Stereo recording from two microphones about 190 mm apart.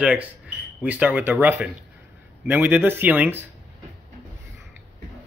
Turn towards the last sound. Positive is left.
turn(degrees=-10)  # may be behind; listen again after turning